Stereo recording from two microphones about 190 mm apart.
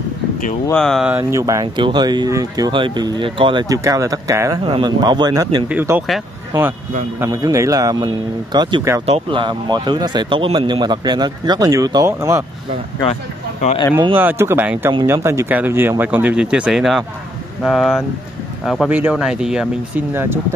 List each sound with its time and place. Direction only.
0.7 s speech: 5° left (ahead or behind); by 5.7 s 20° right (ahead or behind)
5.7 s speech: 10° right (ahead or behind)
7.2 s speech: 15° right (ahead or behind)
9.0 s speech: 30° right (ahead or behind)
13.1 s speech: 35° left (ahead or behind)
14.1 s speech: 10° right (ahead or behind)